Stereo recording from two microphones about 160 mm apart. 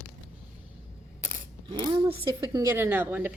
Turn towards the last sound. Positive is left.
turn(degrees=-10)  # may be behind; listen again after turning